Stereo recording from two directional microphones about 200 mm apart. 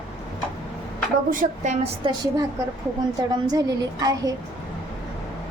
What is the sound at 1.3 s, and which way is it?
Speech, 40° right (ahead or behind).